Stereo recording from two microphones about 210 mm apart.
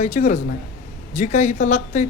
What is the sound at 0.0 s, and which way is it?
Speech, 35° left (ahead or behind).